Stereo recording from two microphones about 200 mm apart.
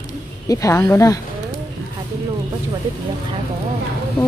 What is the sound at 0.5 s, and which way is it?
Speech, 15° left (ahead or behind).